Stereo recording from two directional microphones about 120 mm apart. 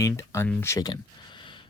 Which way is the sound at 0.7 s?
35° left (ahead or behind).